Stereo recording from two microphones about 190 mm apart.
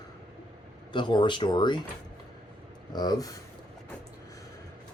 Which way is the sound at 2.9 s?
20° left (ahead or behind).